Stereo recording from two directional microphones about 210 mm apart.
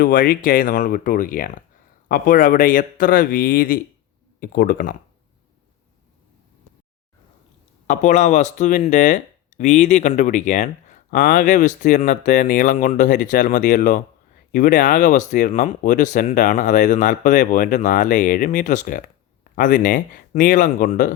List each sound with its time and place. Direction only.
0.0 s speech: 40° left (ahead or behind)
7.9 s speech: 35° left (ahead or behind)